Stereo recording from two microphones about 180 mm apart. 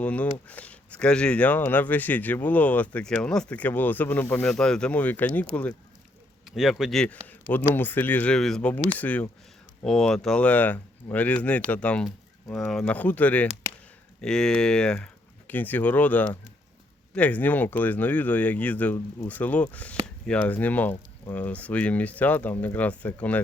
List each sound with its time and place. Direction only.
0.0 s speech: 5° left (ahead or behind)
6.6 s speech: centre (ahead or behind)